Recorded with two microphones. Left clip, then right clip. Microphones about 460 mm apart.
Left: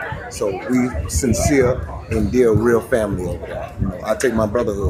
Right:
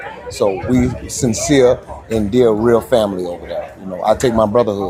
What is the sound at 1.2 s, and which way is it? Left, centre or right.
Speech, centre.